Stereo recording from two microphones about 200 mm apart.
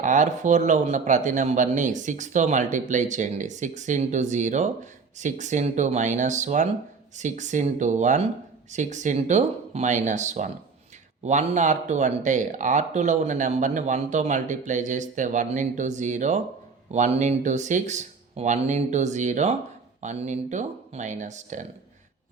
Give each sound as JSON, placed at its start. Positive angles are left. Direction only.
{"t": 0.0, "sound": "speech", "side_deg": -40}